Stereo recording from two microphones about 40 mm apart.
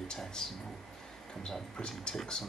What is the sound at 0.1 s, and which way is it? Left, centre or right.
Speech, centre.